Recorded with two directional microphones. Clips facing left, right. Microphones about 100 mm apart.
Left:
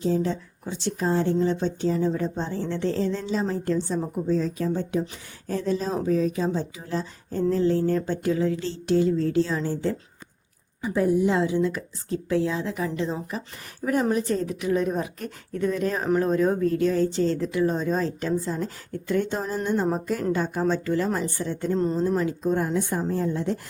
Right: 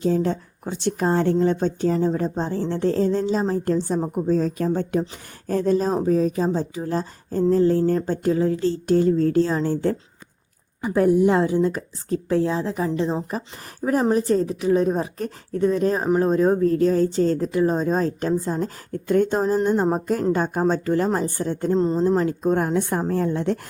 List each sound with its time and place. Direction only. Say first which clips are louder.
0.0 s speech: right 3 dB; 55° right (ahead or behind)
5.9 s speech: right 4 dB; 35° right (ahead or behind)
10.8 s speech: right 4 dB; 55° right (ahead or behind)
21.8 s a woman's voice: right 4 dB; 25° right (ahead or behind)
22.1 s speech: right 4 dB; 45° right (ahead or behind); by 23.6 s 65° right (ahead or behind)